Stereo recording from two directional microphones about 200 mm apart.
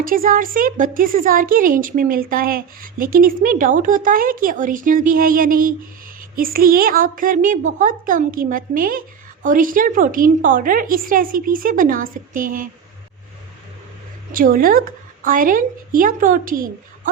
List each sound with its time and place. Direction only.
0.0 s a woman's voice: 45° right (ahead or behind)
14.3 s a woman's voice: 45° right (ahead or behind)